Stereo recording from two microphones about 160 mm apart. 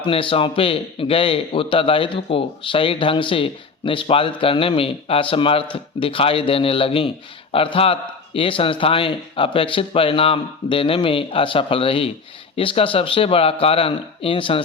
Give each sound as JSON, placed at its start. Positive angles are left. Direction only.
{"t": 0.0, "sound": "a man's voice", "side_deg": 35}